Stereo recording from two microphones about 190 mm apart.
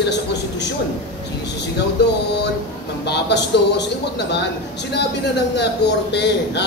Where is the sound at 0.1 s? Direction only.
65° left (ahead or behind).